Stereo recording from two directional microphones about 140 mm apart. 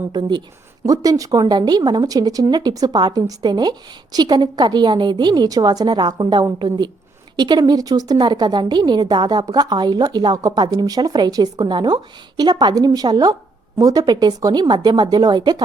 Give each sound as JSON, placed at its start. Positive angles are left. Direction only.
{"t": 0.1, "sound": "a woman's voice", "side_deg": -30}